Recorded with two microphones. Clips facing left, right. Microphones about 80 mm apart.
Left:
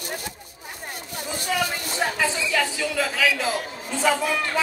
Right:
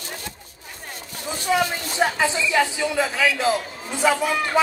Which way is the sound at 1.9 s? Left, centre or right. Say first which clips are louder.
Right 4 dB; right.